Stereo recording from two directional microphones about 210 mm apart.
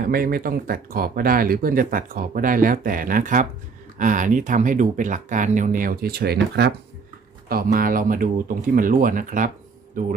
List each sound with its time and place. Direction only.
0.0 s speech: 45° right (ahead or behind)